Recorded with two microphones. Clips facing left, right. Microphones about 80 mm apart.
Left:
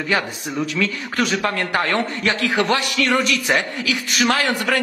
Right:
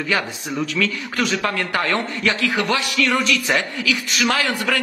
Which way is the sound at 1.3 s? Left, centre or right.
Left.